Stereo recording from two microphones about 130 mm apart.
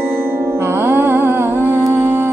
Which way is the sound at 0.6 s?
20° right (ahead or behind).